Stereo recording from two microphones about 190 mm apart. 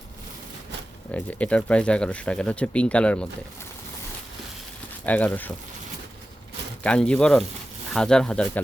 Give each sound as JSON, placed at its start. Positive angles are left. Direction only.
{"t": 1.1, "sound": "speech", "side_deg": 5}
{"t": 5.0, "sound": "speech", "side_deg": 10}
{"t": 6.8, "sound": "speech", "side_deg": 5}